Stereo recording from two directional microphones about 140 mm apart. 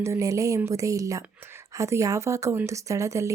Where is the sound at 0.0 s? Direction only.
20° right (ahead or behind).